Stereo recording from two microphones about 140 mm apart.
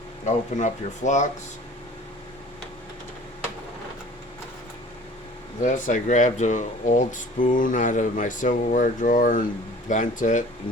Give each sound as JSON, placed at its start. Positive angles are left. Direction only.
{"t": 0.3, "sound": "speech", "side_deg": 60}
{"t": 5.6, "sound": "speech", "side_deg": 65}